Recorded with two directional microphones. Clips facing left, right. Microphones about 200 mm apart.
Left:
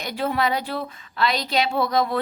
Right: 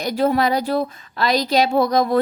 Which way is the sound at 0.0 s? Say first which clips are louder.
Right 6 dB; 40° right (ahead or behind).